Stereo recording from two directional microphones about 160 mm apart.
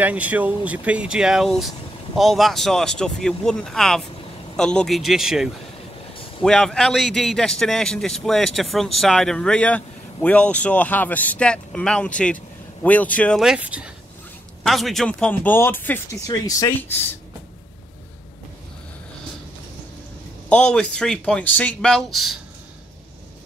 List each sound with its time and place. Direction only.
0.0 s a man's voice: 10° right (ahead or behind); by 13.4 s 10° left (ahead or behind)
13.4 s speech: 5° right (ahead or behind); by 16.9 s 20° left (ahead or behind)
20.4 s a man's voice: 10° left (ahead or behind)